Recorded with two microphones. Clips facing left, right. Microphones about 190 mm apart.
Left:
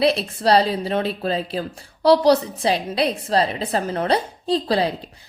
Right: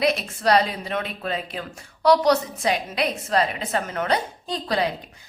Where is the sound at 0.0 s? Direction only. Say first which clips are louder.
Left 3 dB; 30° left (ahead or behind).